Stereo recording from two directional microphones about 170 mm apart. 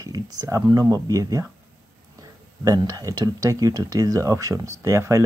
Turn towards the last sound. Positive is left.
turn(degrees=-15)  # may be behind; listen again after turning